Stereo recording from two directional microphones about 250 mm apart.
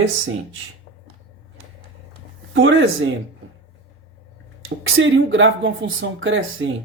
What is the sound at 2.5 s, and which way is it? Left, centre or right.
Speech, right.